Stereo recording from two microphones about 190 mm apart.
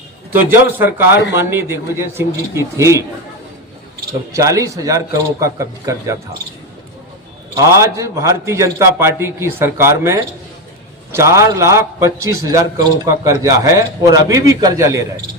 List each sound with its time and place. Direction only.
0.4 s a man's voice: 10° right (ahead or behind)
1.1 s speech: 65° left (ahead or behind)
1.4 s a man's voice: 15° right (ahead or behind)
4.3 s a man's voice: 15° right (ahead or behind)
7.5 s a man's voice: 15° right (ahead or behind)